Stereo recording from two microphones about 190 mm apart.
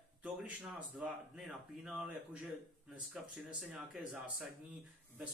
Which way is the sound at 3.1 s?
5° right (ahead or behind).